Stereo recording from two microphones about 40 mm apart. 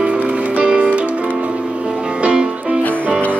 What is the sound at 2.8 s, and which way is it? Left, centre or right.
Music, left.